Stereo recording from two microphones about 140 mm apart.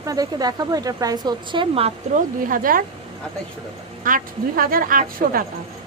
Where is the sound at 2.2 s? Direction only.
80° right.